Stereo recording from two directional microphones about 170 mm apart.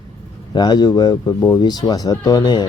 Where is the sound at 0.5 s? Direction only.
25° left (ahead or behind).